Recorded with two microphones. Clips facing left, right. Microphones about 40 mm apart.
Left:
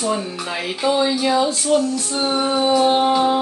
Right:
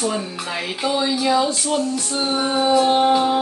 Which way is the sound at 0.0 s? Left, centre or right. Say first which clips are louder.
Left 1 dB; centre.